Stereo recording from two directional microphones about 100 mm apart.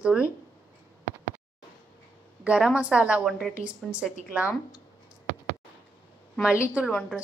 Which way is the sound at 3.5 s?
10° right (ahead or behind).